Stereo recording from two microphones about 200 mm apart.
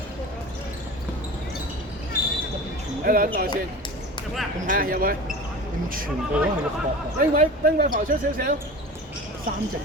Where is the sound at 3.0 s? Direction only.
45° right (ahead or behind).